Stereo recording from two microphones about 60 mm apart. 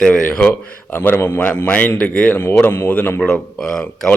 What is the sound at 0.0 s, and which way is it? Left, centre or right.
A man's voice, centre.